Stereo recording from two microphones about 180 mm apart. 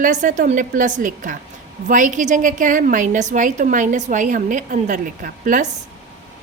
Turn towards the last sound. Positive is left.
turn(degrees=-50)  # may be behind; listen again after turning